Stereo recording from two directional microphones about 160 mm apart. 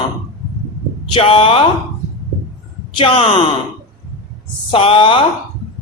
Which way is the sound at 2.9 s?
35° left (ahead or behind).